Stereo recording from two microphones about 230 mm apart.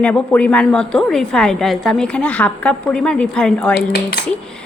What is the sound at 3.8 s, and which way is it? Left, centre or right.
Speech, left.